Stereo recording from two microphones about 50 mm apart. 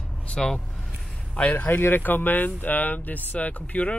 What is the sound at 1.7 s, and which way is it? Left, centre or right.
Speech, left.